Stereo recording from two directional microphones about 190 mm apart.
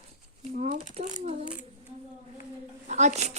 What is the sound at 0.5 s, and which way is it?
Coin, 40° right (ahead or behind).